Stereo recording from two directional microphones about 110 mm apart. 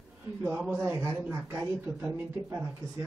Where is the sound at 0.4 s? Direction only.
25° right (ahead or behind).